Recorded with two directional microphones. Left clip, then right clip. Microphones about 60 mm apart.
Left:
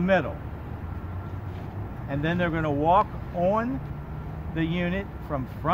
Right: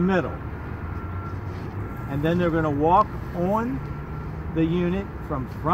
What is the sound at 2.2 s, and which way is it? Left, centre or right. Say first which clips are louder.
Speech: right 4 dB; left.